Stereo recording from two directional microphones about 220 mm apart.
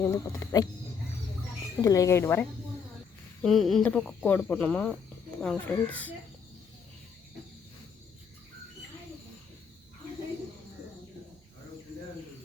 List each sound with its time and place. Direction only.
0.0 s speech: 15° left (ahead or behind)
1.8 s speech: 15° left (ahead or behind)
3.4 s speech: centre (ahead or behind)